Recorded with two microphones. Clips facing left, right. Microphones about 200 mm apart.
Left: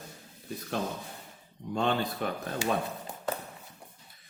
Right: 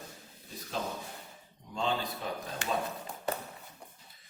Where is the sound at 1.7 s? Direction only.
60° left (ahead or behind).